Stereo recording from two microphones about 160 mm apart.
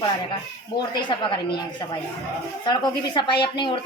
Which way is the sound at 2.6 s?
25° left (ahead or behind).